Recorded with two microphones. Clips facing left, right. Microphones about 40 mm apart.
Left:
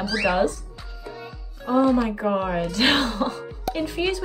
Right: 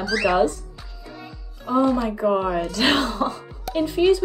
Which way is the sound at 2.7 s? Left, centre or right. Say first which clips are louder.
Left 1 dB; left.